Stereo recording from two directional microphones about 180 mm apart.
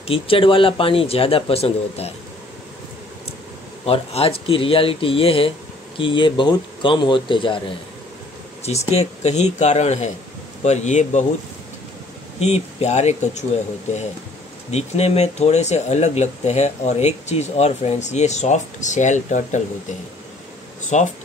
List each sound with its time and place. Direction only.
0.0 s speech: 30° left (ahead or behind)
3.8 s speech: 35° left (ahead or behind)
12.4 s speech: 35° left (ahead or behind)
14.7 s speech: 35° left (ahead or behind)